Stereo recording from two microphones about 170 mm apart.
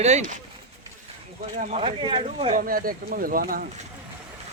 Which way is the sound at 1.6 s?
35° right (ahead or behind).